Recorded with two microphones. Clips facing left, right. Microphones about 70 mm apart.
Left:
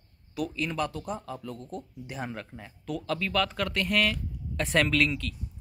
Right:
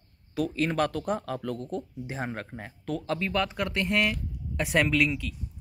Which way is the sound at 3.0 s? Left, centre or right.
Right.